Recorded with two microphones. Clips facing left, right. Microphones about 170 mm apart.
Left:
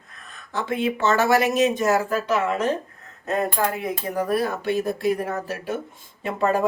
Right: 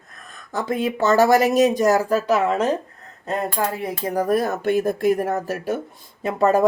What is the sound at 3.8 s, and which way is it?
A woman's voice, 35° right (ahead or behind).